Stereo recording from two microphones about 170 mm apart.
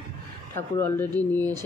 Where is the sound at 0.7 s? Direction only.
10° left (ahead or behind).